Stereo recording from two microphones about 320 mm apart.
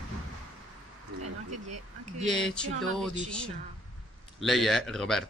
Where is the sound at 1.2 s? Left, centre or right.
Right.